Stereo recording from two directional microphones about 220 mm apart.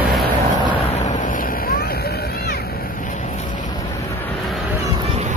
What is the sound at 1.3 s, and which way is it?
Vehicle, 40° left (ahead or behind).